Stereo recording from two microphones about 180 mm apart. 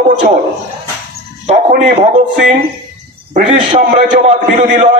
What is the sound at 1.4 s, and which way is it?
A man's voice, 40° right (ahead or behind).